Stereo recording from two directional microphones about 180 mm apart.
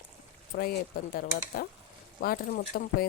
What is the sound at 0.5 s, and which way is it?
Speech, 60° left (ahead or behind).